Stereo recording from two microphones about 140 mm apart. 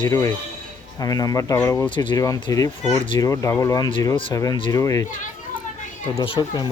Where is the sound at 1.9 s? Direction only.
35° left (ahead or behind).